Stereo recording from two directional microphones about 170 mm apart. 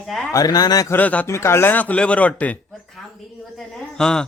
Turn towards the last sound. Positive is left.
turn(degrees=5)  # may be behind; listen again after turning